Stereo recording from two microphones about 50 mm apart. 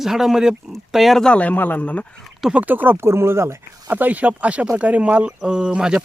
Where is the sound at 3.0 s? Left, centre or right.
Right.